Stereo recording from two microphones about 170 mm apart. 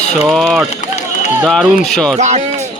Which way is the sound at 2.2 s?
45° right (ahead or behind).